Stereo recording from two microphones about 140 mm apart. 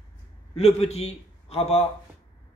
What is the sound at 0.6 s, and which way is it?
A man's voice, 50° left (ahead or behind).